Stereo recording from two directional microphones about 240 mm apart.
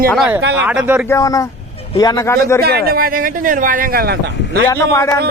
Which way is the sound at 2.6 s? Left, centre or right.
Right.